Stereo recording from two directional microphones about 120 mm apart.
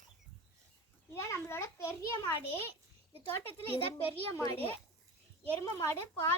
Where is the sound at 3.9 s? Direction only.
20° left (ahead or behind).